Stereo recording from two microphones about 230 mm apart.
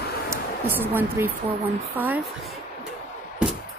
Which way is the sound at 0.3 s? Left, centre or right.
Centre.